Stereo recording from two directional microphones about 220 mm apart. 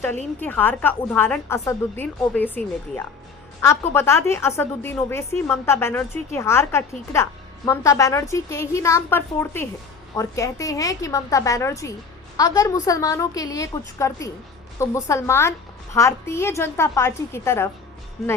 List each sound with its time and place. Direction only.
0.3 s a woman's voice: 10° left (ahead or behind)
3.6 s a woman's voice: 10° left (ahead or behind)
18.2 s speech: centre (ahead or behind)